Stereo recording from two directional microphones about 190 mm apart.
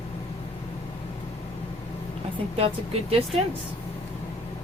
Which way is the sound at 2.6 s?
30° right (ahead or behind).